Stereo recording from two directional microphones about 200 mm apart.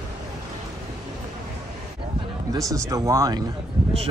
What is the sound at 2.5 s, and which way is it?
Speech, 15° right (ahead or behind).